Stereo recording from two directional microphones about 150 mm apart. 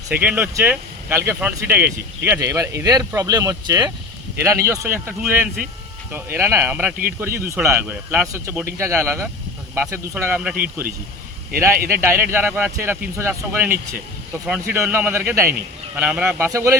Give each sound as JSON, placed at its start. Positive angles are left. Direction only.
{"t": 0.1, "sound": "speech", "side_deg": -10}
{"t": 16.5, "sound": "speech", "side_deg": -20}